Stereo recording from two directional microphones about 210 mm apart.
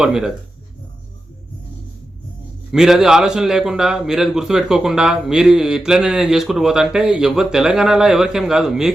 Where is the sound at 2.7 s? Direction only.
Centre (ahead or behind).